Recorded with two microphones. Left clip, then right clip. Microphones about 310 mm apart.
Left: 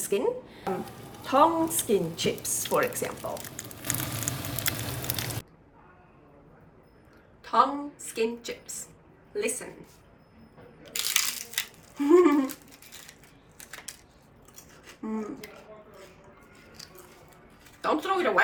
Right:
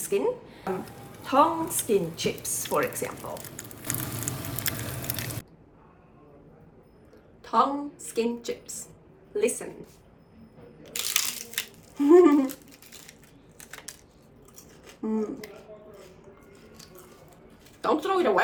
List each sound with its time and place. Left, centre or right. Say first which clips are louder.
0.0 s a sound: right 1 dB; centre
7.5 s speech: even; centre
11.0 s crushing: left 1 dB; centre
11.9 s speech: right 3 dB; centre
14.8 s a sound: right 5 dB; centre
17.8 s speech: right 2 dB; centre